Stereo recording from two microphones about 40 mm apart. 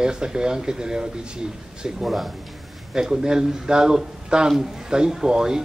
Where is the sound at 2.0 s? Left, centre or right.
Centre.